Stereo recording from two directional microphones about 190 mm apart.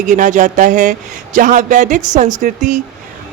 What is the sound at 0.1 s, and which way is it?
A woman's voice, 40° right (ahead or behind).